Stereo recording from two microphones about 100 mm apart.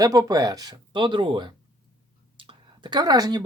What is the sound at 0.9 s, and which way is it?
Speech, 55° right (ahead or behind).